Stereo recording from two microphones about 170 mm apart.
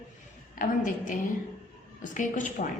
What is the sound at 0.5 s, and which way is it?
A woman's voice, 50° left (ahead or behind).